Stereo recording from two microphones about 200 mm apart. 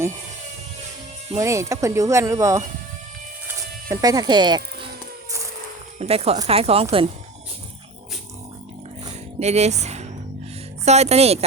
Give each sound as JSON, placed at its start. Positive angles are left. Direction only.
{"t": 1.4, "sound": "speech", "side_deg": -15}
{"t": 3.4, "sound": "music", "side_deg": -15}
{"t": 6.0, "sound": "speech", "side_deg": -30}
{"t": 9.4, "sound": "speech", "side_deg": -35}